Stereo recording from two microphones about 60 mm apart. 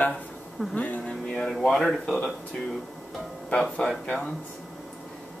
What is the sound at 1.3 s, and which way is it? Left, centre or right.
Speech, centre.